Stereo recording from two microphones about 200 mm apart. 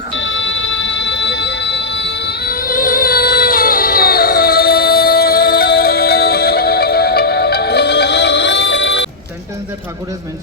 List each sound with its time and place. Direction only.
0.1 s music: 65° left (ahead or behind)